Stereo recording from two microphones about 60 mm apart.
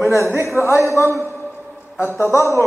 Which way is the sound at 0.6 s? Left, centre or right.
Left.